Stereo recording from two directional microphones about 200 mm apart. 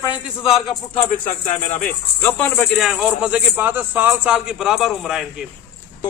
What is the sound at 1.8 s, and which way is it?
A man's voice, 10° left (ahead or behind).